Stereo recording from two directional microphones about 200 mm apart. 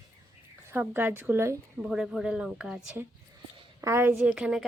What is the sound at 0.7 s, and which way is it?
A woman's voice, 10° right (ahead or behind).